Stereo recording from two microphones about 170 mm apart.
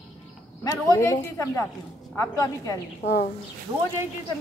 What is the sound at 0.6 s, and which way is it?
Speech, 20° left (ahead or behind).